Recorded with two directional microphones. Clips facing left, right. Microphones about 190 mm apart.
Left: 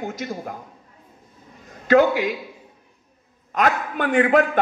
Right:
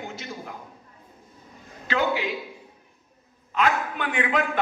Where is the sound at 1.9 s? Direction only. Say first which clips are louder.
Left 9 dB; 45° left (ahead or behind).